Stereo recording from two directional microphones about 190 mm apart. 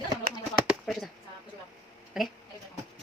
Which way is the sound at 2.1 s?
5° right (ahead or behind).